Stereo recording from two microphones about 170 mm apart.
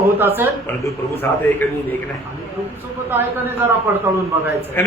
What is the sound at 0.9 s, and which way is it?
Speech, 15° left (ahead or behind).